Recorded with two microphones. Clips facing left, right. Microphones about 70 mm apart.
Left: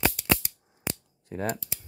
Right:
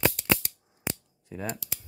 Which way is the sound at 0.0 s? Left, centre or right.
Centre.